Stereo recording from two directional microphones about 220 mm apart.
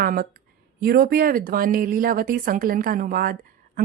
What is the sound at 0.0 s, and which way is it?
A woman's voice, 40° right (ahead or behind).